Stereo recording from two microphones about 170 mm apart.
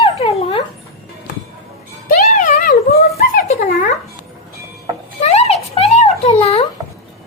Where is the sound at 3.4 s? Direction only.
45° left (ahead or behind).